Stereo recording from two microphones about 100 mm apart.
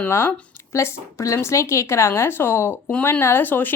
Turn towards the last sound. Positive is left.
turn(degrees=20)  # may be behind; listen again after turning